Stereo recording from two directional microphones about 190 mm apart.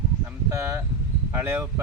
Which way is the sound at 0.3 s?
15° right (ahead or behind).